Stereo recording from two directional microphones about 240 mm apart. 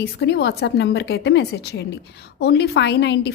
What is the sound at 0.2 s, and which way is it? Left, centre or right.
A woman's voice, left.